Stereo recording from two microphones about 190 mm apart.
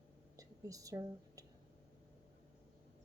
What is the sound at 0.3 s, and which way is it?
Whispering, 20° right (ahead or behind).